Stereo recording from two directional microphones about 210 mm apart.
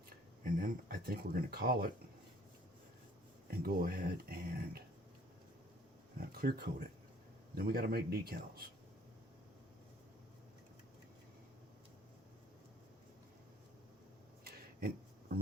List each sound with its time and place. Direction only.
0.4 s speech: 40° right (ahead or behind)
3.5 s speech: 45° right (ahead or behind)
6.1 s speech: 45° right (ahead or behind)